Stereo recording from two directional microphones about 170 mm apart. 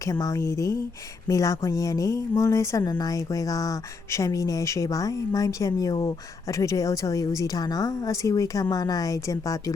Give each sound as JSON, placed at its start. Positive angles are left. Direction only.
{"t": 0.0, "sound": "speech", "side_deg": 20}